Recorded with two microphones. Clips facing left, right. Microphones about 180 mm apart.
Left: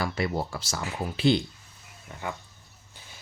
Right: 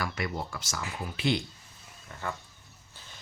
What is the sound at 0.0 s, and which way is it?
Speech, 30° left (ahead or behind).